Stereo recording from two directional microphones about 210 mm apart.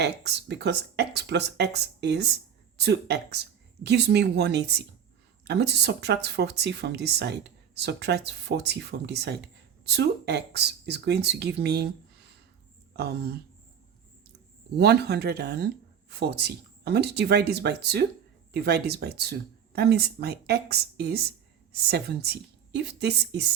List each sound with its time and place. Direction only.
0.0 s speech: 50° right (ahead or behind)
14.8 s speech: 50° right (ahead or behind)